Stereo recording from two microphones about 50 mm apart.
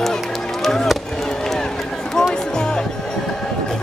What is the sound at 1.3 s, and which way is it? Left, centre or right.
Run, centre.